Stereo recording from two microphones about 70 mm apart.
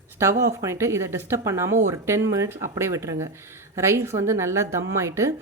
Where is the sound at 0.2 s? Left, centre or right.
Right.